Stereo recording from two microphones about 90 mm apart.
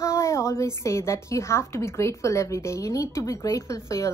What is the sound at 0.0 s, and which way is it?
A woman's voice, 35° left (ahead or behind).